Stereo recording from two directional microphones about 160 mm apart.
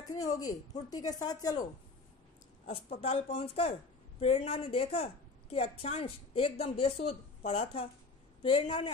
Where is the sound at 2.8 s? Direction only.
40° left (ahead or behind).